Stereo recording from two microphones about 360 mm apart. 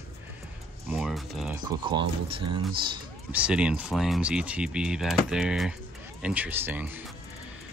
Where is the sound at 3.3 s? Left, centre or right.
Centre.